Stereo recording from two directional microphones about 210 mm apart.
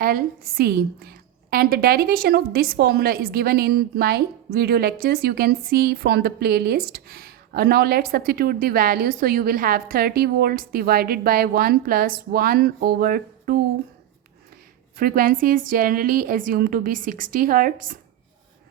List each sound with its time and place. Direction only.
0.0 s a woman's voice: 45° right (ahead or behind)
14.9 s a woman's voice: 45° right (ahead or behind)